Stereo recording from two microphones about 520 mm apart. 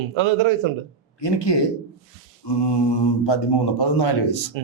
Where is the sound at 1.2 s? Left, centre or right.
Left.